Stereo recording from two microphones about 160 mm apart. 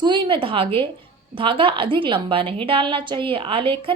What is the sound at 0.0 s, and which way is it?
A woman's voice, 30° right (ahead or behind).